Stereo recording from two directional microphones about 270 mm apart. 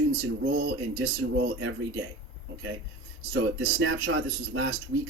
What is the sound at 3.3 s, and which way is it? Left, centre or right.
Speech, right.